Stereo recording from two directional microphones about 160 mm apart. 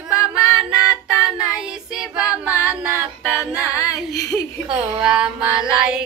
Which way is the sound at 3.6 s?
20° left (ahead or behind).